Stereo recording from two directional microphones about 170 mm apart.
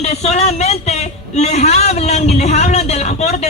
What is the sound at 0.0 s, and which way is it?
Speech, 40° left (ahead or behind).